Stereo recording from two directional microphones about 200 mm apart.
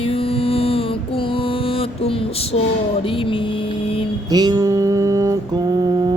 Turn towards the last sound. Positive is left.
turn(degrees=-20)  # may be behind; listen again after turning